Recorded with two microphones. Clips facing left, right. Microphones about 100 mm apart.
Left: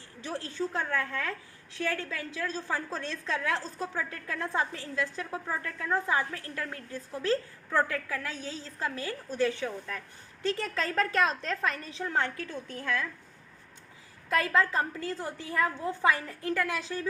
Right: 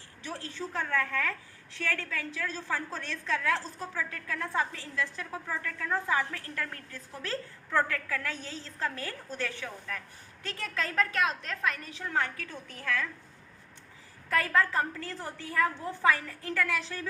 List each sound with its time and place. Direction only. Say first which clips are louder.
0.3 s a woman's voice: left 4 dB; 20° left (ahead or behind)
14.3 s a woman's voice: left 1 dB; 20° left (ahead or behind)